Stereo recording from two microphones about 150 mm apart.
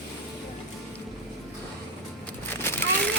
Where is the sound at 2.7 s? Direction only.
15° left (ahead or behind).